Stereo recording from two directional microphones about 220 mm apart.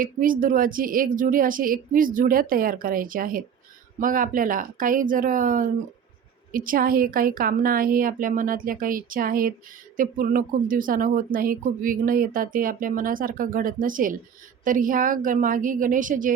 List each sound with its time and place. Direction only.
0.0 s speech: 40° right (ahead or behind)